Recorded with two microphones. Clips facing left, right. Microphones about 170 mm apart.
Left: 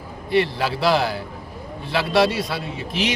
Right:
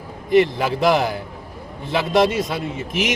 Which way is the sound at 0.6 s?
15° right (ahead or behind).